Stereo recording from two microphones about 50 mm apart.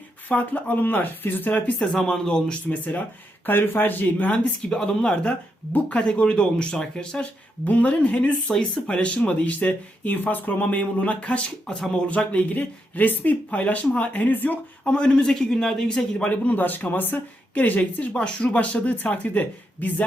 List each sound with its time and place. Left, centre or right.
0.3 s speech: left
1.8 s speech: centre
2.6 s speech: left
4.6 s speech: left
7.6 s speech: left
8.4 s speech: centre; by 14.6 s left
14.8 s speech: left
16.1 s speech: left
17.5 s speech: left
18.1 s speech: centre
18.5 s speech: left